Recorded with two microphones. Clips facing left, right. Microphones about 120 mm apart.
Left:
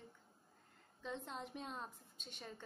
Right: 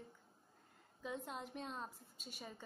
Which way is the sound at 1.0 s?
5° right (ahead or behind).